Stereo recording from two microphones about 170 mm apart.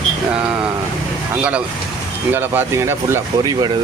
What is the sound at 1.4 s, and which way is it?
Speech, 5° right (ahead or behind).